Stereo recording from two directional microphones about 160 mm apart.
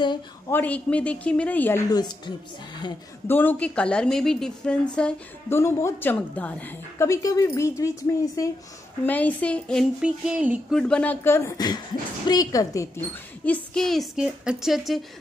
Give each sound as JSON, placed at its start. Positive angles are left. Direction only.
{"t": 0.5, "sound": "a woman's voice", "side_deg": 10}
{"t": 1.9, "sound": "a woman's voice", "side_deg": 25}
{"t": 3.3, "sound": "a woman's voice", "side_deg": 10}
{"t": 5.6, "sound": "a woman's voice", "side_deg": 15}
{"t": 9.0, "sound": "a woman's voice", "side_deg": 10}
{"t": 10.0, "sound": "a sound", "side_deg": -5}
{"t": 10.8, "sound": "a woman's voice", "side_deg": 5}
{"t": 13.5, "sound": "a woman's voice", "side_deg": 0}